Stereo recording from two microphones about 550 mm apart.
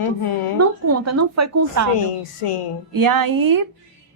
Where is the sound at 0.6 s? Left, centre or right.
Right.